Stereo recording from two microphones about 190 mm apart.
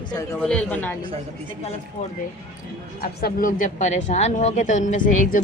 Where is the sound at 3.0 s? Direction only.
45° left (ahead or behind).